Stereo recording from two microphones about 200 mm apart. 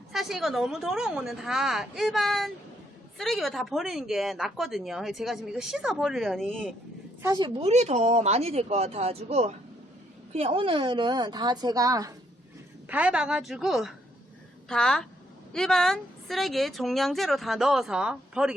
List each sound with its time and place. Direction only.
0.1 s a woman's voice: centre (ahead or behind)
7.2 s a woman's voice: 20° right (ahead or behind)
12.9 s a woman's voice: 5° right (ahead or behind)